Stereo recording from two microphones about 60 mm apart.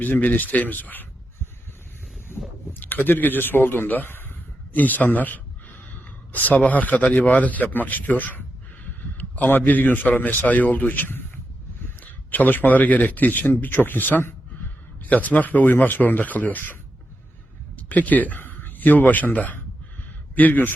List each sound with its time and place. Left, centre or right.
0.0 s speech: left
2.7 s a man's voice: left
12.3 s speech: left
17.7 s a man's voice: left